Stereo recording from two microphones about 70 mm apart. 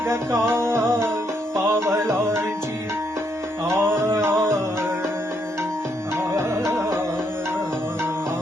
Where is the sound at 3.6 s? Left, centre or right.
Right.